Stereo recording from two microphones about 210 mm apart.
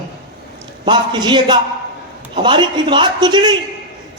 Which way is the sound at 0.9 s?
20° right (ahead or behind).